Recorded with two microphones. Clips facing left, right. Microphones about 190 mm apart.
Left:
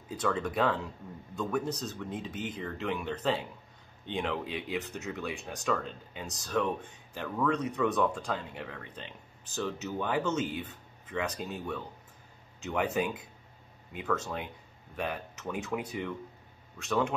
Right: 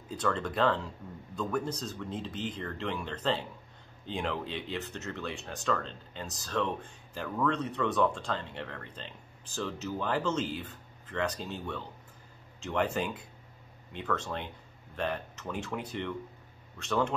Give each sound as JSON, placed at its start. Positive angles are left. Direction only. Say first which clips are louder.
{"t": 0.1, "sound": "speech", "louder": "left 1 dB", "side_deg": 5}